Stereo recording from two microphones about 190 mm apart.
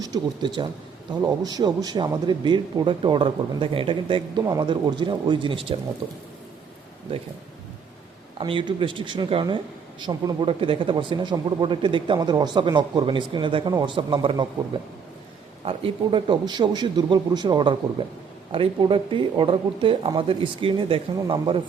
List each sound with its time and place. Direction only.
0.0 s speech: 20° right (ahead or behind)
8.4 s speech: 25° right (ahead or behind)
15.6 s speech: 25° right (ahead or behind)